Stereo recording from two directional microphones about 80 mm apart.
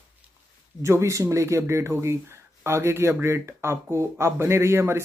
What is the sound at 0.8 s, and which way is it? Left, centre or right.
Speech, right.